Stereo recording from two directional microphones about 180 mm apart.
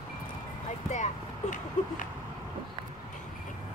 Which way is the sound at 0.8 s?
40° left (ahead or behind).